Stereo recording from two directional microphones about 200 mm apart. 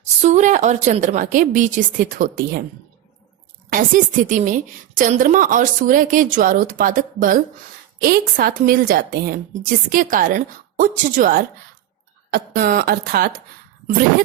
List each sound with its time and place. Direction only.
0.2 s a woman's voice: 35° right (ahead or behind)
3.7 s a woman's voice: 40° right (ahead or behind)